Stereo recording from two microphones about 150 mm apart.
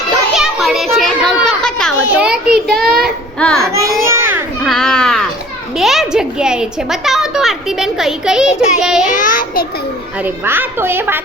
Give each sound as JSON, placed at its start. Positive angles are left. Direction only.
{"t": 0.3, "sound": "children playing", "side_deg": -5}
{"t": 2.1, "sound": "child singing", "side_deg": -5}
{"t": 3.7, "sound": "baby cry", "side_deg": -20}
{"t": 4.6, "sound": "baby cry", "side_deg": 5}
{"t": 5.7, "sound": "a child's voice", "side_deg": 0}
{"t": 9.0, "sound": "child singing", "side_deg": 60}
{"t": 10.2, "sound": "a woman's voice", "side_deg": -15}